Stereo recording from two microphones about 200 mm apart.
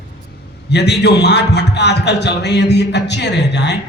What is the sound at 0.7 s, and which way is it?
A man's voice, 55° left (ahead or behind).